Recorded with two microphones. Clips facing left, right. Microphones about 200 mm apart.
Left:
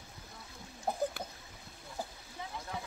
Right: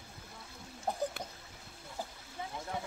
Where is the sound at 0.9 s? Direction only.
10° left (ahead or behind).